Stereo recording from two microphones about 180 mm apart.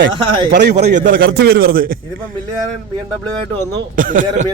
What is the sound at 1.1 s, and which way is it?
Speech, 70° right (ahead or behind).